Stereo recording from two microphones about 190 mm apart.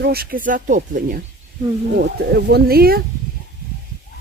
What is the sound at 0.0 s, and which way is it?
Speech, 55° right (ahead or behind).